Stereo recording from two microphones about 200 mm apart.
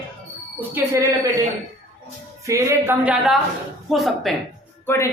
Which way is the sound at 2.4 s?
15° right (ahead or behind).